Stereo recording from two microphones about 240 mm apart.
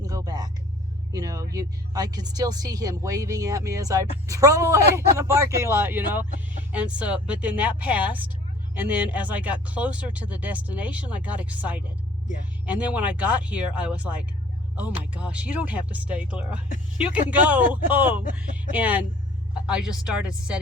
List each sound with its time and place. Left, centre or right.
0.0 s vehicle: centre
1.5 s speech: centre